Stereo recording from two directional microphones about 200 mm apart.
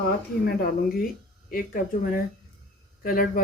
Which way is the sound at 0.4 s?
50° left (ahead or behind).